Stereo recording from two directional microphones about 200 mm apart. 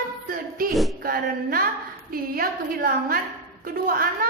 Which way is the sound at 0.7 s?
Centre (ahead or behind).